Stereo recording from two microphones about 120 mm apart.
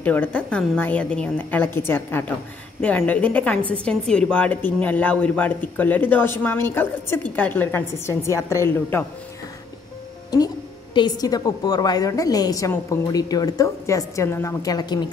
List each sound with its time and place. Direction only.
0.0 s a woman's voice: 15° left (ahead or behind)
11.0 s a woman's voice: 35° left (ahead or behind)